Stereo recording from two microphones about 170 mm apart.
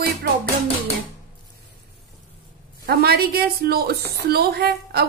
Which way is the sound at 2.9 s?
65° right (ahead or behind).